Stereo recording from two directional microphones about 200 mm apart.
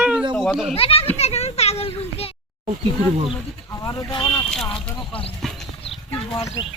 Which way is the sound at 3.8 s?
15° left (ahead or behind).